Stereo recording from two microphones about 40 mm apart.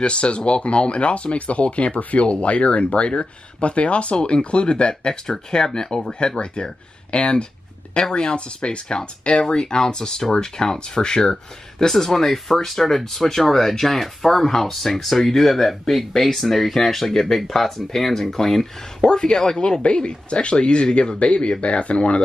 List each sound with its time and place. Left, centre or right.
0.0 s speech: left
2.0 s speech: left
2.2 s speech: left
5.2 s speech: centre
19.0 s speech: left